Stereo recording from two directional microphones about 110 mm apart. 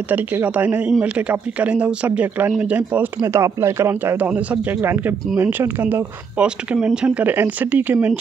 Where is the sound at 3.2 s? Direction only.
25° right (ahead or behind).